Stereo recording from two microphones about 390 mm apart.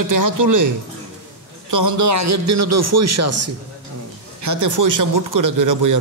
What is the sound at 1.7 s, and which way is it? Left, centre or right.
Speech, right.